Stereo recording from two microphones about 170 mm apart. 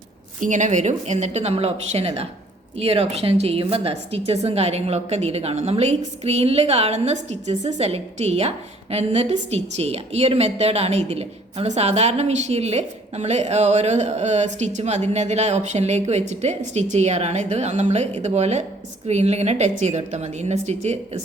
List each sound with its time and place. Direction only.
0.3 s a woman's voice: 50° right (ahead or behind)